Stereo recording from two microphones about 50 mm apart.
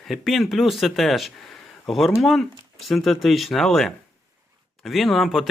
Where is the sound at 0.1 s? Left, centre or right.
Centre.